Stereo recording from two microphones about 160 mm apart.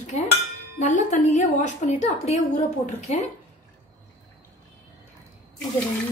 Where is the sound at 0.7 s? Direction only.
50° left (ahead or behind).